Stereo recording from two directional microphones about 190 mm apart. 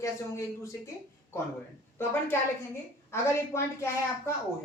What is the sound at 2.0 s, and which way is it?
A woman's voice, 10° left (ahead or behind).